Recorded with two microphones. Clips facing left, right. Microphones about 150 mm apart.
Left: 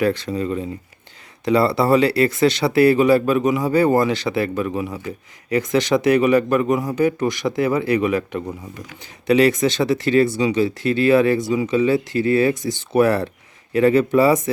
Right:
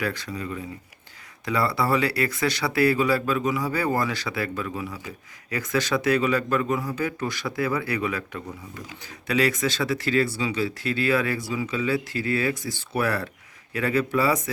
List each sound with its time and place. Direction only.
0.0 s speech: 25° left (ahead or behind)